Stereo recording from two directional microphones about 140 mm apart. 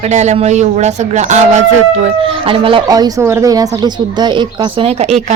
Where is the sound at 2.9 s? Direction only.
25° right (ahead or behind); by 5.2 s 50° right (ahead or behind).